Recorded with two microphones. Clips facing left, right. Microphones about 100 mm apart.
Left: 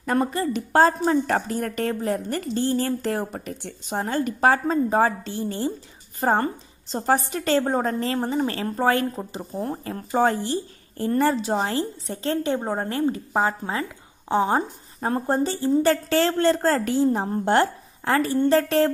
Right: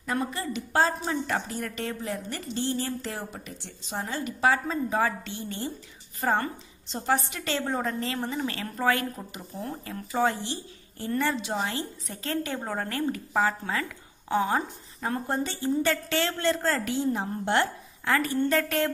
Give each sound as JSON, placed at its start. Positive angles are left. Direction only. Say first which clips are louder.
{"t": 0.0, "sound": "a woman's voice", "louder": "left 7 dB", "side_deg": 50}